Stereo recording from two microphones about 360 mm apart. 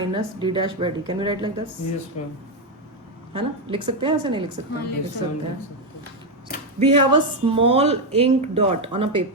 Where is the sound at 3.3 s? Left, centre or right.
Centre.